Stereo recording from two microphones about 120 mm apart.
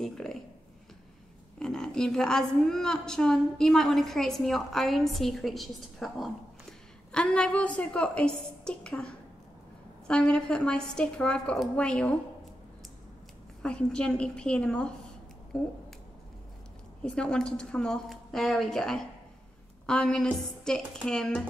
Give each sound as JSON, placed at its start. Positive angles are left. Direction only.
{"t": 0.0, "sound": "a sound", "side_deg": 5}
{"t": 1.6, "sound": "a woman's voice", "side_deg": 5}
{"t": 13.6, "sound": "a woman's voice", "side_deg": 10}
{"t": 17.0, "sound": "a woman's voice", "side_deg": 10}